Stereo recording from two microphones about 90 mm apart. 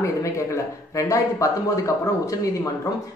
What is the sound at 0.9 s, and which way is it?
Speech, 35° left (ahead or behind).